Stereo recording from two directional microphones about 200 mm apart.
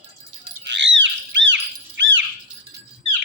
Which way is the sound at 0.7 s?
65° right (ahead or behind).